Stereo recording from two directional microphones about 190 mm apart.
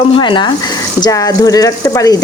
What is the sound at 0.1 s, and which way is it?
Speech, 25° left (ahead or behind).